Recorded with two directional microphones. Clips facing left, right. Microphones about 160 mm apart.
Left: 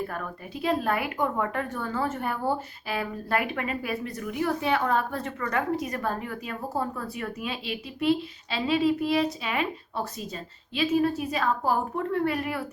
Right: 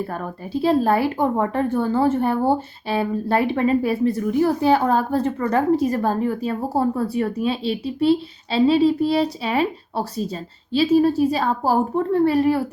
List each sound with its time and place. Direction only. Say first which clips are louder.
0.1 s speech: right 8 dB; 30° right (ahead or behind)